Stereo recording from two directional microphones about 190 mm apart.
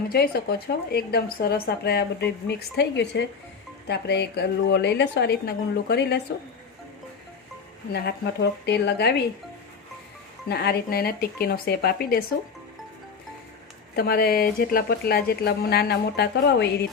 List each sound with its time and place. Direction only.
0.1 s a woman's voice: 55° left (ahead or behind)
7.9 s a woman's voice: 60° left (ahead or behind)
10.5 s a woman's voice: 60° left (ahead or behind)
13.9 s a woman's voice: 55° left (ahead or behind)